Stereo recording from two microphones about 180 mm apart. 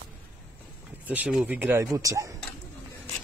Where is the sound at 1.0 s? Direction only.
10° right (ahead or behind).